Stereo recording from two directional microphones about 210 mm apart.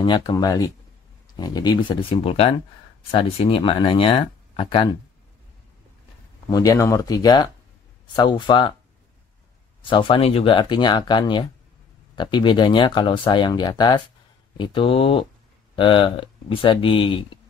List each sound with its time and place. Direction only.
0.0 s speech: 20° left (ahead or behind)
6.5 s speech: 15° left (ahead or behind)
9.8 s speech: 25° left (ahead or behind)